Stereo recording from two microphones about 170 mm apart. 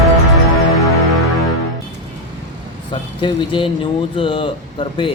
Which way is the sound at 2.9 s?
30° left (ahead or behind).